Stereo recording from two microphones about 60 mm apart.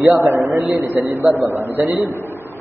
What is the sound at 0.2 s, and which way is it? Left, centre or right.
A man's voice, right.